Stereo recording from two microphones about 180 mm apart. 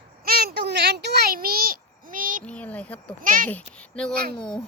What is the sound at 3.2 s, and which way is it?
Speech, 50° right (ahead or behind).